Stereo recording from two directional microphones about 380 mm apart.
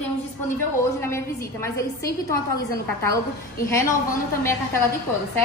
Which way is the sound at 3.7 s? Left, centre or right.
Centre.